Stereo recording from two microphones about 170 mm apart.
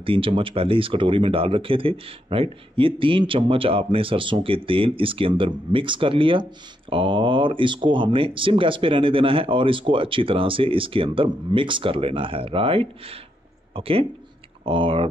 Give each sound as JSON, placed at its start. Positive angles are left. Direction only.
{"t": 0.0, "sound": "speech", "side_deg": -30}